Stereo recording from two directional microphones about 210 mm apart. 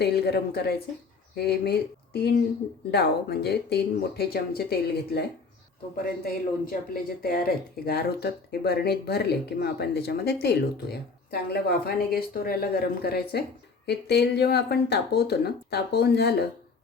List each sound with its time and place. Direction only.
0.0 s speech: 50° left (ahead or behind)
2.9 s speech: 50° left (ahead or behind)